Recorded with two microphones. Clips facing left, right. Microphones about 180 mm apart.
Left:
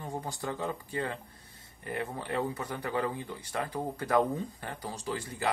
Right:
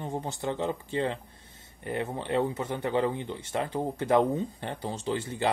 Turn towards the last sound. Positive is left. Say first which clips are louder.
# right 5 dB
turn(degrees=-25)  # may be behind; listen again after turning